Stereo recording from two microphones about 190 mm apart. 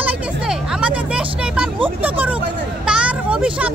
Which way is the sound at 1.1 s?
5° right (ahead or behind).